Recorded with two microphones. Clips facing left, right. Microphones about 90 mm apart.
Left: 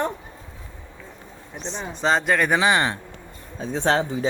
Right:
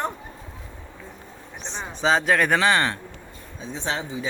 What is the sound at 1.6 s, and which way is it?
Speech, centre (ahead or behind).